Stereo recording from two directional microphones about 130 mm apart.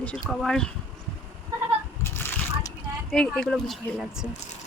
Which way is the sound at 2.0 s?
20° left (ahead or behind).